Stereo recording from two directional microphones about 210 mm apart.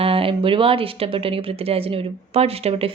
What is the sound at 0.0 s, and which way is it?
A woman's voice, 25° right (ahead or behind).